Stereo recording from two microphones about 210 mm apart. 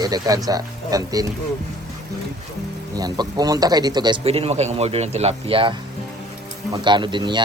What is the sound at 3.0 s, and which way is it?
A man's voice, 20° right (ahead or behind).